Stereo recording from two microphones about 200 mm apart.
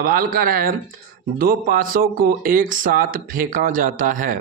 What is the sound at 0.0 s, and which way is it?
Speech, 45° right (ahead or behind).